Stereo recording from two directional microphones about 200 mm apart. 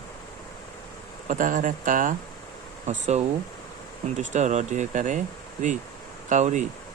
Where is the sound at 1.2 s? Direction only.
40° right (ahead or behind).